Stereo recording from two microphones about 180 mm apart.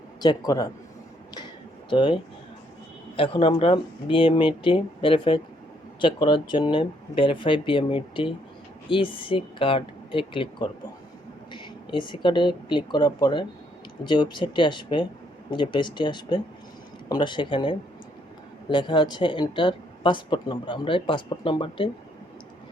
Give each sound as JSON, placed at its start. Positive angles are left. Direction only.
{"t": 0.2, "sound": "speech", "side_deg": 25}
{"t": 1.9, "sound": "speech", "side_deg": 25}
{"t": 3.2, "sound": "speech", "side_deg": 30}